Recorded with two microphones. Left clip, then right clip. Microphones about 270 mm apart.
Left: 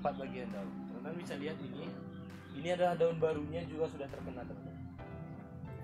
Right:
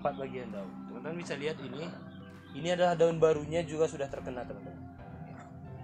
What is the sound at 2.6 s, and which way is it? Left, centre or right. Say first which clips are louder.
A man's voice: right 5 dB; centre.